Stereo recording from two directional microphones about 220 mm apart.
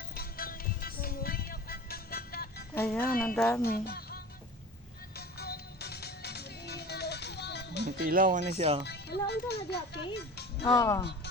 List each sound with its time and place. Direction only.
0.1 s music: 40° left (ahead or behind)
2.7 s speech: 5° left (ahead or behind)
3.0 s speech: 40° left (ahead or behind)
3.3 s speech: 5° left (ahead or behind)
3.6 s speech: 45° left (ahead or behind)
5.1 s music: 45° left (ahead or behind)
8.0 s speech: 40° right (ahead or behind)
8.9 s speech: 50° left (ahead or behind)
10.8 s speech: 15° left (ahead or behind)